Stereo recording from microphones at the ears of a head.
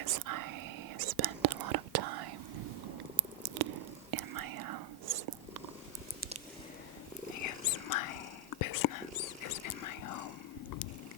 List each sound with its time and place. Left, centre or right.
0.0 s whispering: right
7.3 s whispering: left